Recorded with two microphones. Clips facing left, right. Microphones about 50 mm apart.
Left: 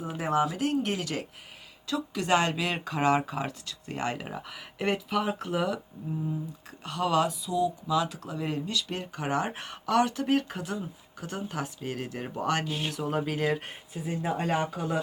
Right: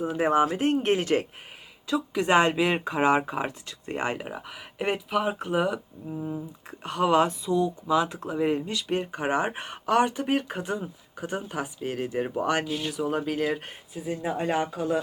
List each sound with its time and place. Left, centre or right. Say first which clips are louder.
0.2 s speech: right 4 dB; right
4.3 s speech: right 1 dB; centre
6.2 s speech: right 1 dB; right; by 15.0 s centre